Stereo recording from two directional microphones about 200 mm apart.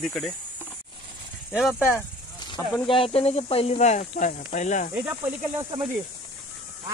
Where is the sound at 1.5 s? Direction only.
5° right (ahead or behind).